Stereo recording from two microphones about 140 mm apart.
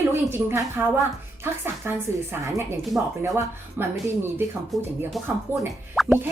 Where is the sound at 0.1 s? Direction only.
15° right (ahead or behind).